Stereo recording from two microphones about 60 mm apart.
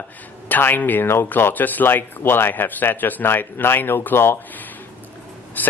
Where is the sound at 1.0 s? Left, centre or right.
Left.